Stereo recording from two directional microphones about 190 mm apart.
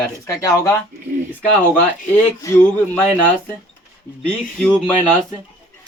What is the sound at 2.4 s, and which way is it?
Speech, 15° left (ahead or behind).